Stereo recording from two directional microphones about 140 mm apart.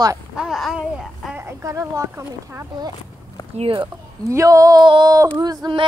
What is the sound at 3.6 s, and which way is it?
Speech, 35° right (ahead or behind).